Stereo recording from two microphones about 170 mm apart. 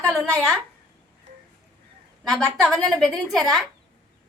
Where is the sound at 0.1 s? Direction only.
Centre (ahead or behind).